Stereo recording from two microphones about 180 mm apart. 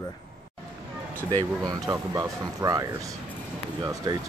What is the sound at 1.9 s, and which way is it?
Speech, 20° right (ahead or behind).